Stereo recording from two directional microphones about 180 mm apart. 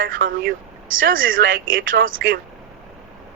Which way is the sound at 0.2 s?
50° right (ahead or behind).